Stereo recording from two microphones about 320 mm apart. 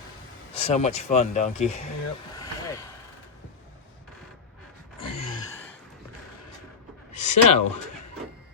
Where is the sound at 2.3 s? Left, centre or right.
Centre.